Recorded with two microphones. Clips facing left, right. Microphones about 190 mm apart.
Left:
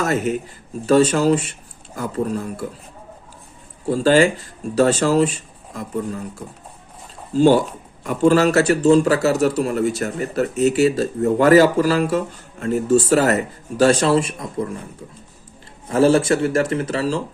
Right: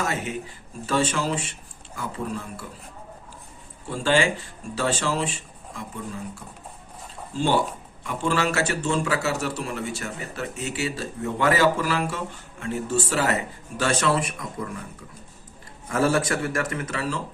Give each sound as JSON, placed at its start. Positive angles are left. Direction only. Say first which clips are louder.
{"t": 0.0, "sound": "a man's voice", "louder": "left 8 dB", "side_deg": 40}
{"t": 3.8, "sound": "a man's voice", "louder": "left 8 dB", "side_deg": 40}
{"t": 7.3, "sound": "a man's voice", "louder": "left 9 dB", "side_deg": 40}
{"t": 15.9, "sound": "a man's voice", "louder": "left 8 dB", "side_deg": 30}